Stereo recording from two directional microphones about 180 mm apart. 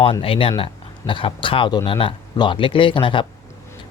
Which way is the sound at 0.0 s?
30° left (ahead or behind).